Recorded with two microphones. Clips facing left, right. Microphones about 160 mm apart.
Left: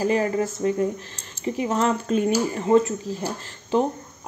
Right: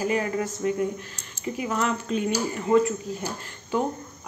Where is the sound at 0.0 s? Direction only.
35° left (ahead or behind).